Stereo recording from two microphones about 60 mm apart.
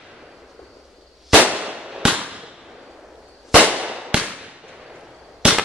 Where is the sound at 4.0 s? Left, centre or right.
Centre.